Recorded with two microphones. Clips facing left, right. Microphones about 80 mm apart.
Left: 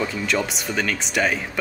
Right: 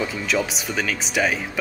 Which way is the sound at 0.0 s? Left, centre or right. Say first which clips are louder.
Even; centre.